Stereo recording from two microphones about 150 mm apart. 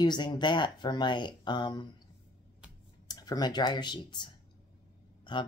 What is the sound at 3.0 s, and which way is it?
Speech, 25° left (ahead or behind).